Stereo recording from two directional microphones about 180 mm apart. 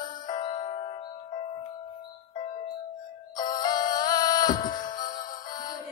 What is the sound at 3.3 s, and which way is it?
Music, 25° left (ahead or behind).